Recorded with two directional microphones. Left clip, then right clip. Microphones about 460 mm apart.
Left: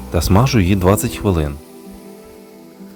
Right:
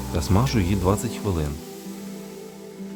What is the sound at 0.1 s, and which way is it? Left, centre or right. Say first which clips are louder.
Speech: left 9 dB; centre.